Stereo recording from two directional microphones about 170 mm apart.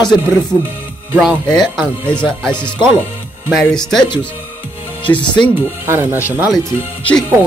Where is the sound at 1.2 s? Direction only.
Centre (ahead or behind).